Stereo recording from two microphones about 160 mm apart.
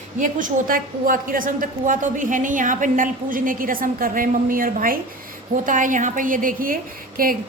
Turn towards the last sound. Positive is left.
turn(degrees=-65)  # may be behind; listen again after turning